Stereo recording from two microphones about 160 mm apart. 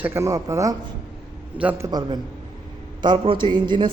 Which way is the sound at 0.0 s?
15° right (ahead or behind).